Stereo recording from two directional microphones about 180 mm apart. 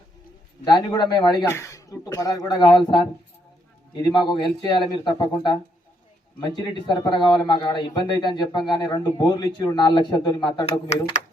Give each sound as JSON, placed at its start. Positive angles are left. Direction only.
{"t": 0.6, "sound": "a man's voice", "side_deg": 25}
{"t": 4.3, "sound": "a man's voice", "side_deg": 25}
{"t": 10.7, "sound": "speech", "side_deg": 35}